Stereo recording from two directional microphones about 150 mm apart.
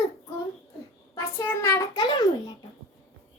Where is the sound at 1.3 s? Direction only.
15° left (ahead or behind).